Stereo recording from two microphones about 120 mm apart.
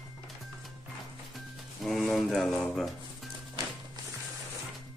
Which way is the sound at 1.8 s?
Centre (ahead or behind).